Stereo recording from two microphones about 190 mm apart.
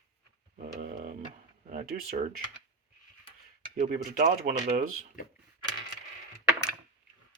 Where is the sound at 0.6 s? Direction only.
40° right (ahead or behind).